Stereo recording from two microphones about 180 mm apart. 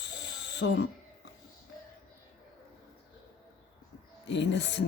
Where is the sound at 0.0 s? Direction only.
75° left (ahead or behind).